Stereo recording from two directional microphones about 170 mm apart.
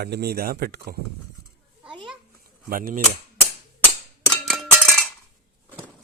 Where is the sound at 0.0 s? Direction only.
70° right (ahead or behind).